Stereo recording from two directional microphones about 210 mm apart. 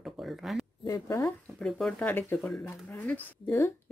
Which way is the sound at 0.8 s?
15° left (ahead or behind).